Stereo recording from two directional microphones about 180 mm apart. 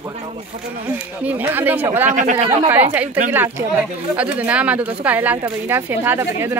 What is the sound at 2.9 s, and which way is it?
Speech, 10° right (ahead or behind).